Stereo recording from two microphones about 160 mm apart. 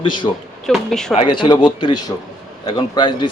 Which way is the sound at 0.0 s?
30° left (ahead or behind).